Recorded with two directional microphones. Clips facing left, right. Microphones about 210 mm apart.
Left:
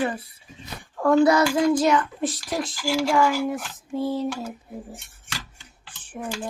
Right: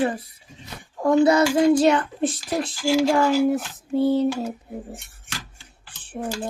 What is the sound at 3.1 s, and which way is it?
Child singing, 40° right (ahead or behind).